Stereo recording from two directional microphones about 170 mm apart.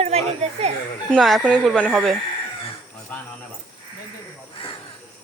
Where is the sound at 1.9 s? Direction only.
5° right (ahead or behind).